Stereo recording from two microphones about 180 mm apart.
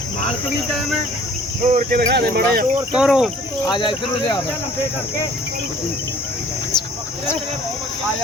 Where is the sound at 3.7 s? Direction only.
25° left (ahead or behind).